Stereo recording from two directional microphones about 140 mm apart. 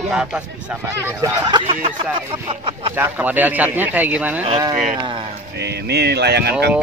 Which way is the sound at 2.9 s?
15° right (ahead or behind).